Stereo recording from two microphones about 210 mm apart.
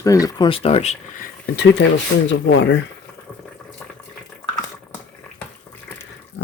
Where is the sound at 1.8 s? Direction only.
55° left (ahead or behind).